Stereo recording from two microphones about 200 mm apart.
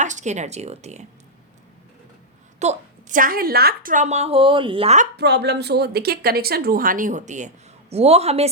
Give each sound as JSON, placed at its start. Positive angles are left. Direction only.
{"t": 0.0, "sound": "speech", "side_deg": -35}
{"t": 2.6, "sound": "a woman's voice", "side_deg": -40}
{"t": 5.1, "sound": "speech", "side_deg": -55}